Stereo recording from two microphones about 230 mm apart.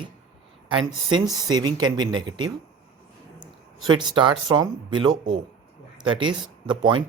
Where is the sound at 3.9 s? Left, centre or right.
Right.